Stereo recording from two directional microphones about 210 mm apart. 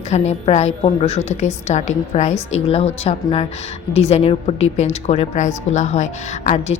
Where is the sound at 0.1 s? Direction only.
30° left (ahead or behind).